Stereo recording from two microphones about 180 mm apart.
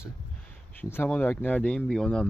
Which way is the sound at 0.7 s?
15° left (ahead or behind).